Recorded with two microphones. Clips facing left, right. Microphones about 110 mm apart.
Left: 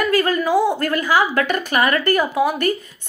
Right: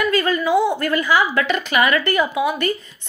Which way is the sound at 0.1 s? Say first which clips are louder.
Left 1 dB; 50° left (ahead or behind).